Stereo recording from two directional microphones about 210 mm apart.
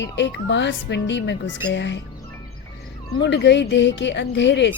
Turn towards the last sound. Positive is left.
turn(degrees=60)  # may be behind; listen again after turning